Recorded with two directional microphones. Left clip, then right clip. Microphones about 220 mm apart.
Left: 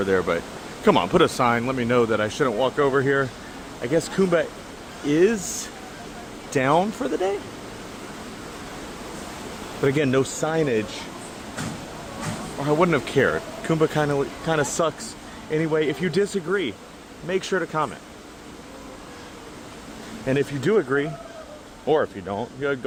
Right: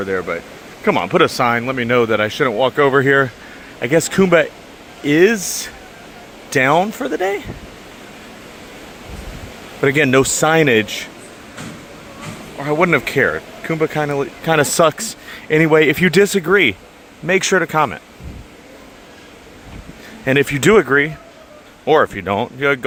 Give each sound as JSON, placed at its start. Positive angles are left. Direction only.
{"t": 0.0, "sound": "speech", "side_deg": 0}
{"t": 9.8, "sound": "speech", "side_deg": -15}
{"t": 12.5, "sound": "speech", "side_deg": -10}
{"t": 20.2, "sound": "speech", "side_deg": -20}